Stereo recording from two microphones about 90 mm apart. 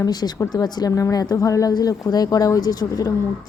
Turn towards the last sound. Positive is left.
turn(degrees=45)  # may be behind; listen again after turning